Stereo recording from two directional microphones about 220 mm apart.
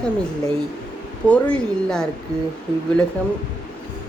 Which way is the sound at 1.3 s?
5° left (ahead or behind).